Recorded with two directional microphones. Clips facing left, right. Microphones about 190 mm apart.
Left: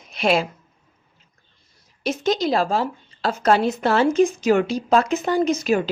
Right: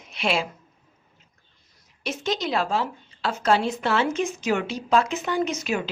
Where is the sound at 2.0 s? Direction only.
35° left (ahead or behind).